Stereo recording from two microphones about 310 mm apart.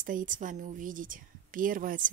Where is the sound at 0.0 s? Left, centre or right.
Right.